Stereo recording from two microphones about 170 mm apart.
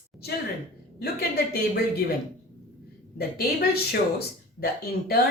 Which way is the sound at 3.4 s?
65° left (ahead or behind).